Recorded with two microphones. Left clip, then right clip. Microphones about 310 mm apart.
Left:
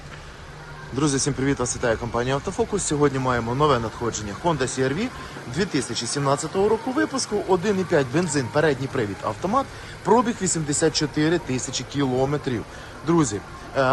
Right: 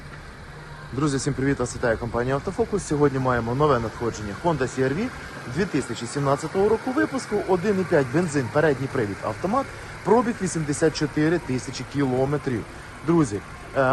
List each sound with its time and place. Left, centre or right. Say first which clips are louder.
0.9 s speech: left 2 dB; centre